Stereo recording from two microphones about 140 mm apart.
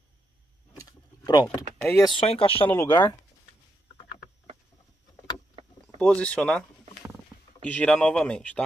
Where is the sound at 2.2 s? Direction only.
40° left (ahead or behind).